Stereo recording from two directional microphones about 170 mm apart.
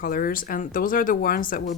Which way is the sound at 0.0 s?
60° left (ahead or behind).